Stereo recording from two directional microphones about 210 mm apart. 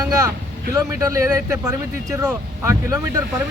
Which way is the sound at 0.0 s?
20° right (ahead or behind).